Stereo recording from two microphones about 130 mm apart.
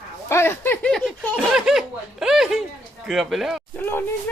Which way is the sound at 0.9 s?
5° left (ahead or behind).